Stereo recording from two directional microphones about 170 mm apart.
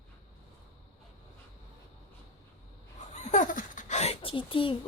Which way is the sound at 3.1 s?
45° left (ahead or behind).